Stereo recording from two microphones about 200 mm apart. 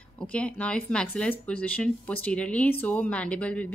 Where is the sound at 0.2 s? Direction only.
5° left (ahead or behind).